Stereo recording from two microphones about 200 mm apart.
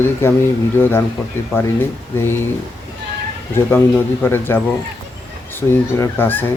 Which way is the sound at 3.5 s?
10° left (ahead or behind).